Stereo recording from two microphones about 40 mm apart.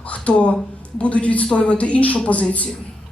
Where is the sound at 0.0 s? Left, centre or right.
Left.